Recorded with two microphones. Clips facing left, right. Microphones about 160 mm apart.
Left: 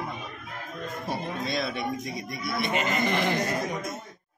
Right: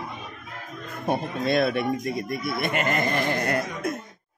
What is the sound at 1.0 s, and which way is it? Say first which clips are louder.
Speech: right 7 dB; 55° right (ahead or behind).